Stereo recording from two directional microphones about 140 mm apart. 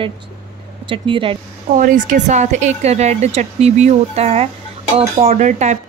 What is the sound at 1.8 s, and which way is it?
A woman's voice, 70° right (ahead or behind).